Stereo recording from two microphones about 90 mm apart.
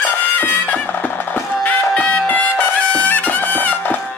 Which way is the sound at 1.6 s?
15° left (ahead or behind).